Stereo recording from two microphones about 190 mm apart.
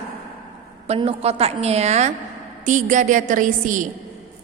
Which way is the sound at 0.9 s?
30° right (ahead or behind).